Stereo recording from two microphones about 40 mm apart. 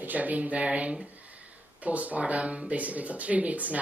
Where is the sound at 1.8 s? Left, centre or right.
Right.